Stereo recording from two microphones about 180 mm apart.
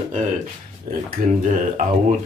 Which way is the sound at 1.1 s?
45° right (ahead or behind).